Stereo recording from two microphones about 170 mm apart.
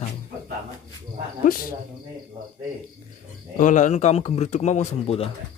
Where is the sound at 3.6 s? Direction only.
45° left (ahead or behind).